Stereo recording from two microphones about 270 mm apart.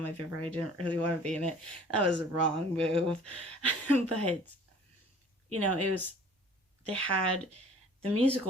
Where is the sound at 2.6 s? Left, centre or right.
Right.